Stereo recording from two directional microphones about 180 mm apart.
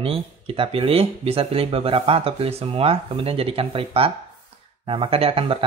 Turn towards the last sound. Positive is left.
turn(degrees=-30)  # may be behind; listen again after turning